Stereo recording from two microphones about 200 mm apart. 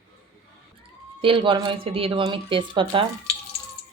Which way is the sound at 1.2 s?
25° right (ahead or behind).